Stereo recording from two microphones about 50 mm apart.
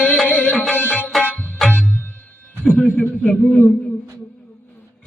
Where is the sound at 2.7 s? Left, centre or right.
Left.